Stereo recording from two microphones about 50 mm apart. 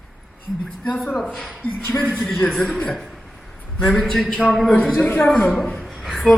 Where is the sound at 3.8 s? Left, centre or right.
Centre.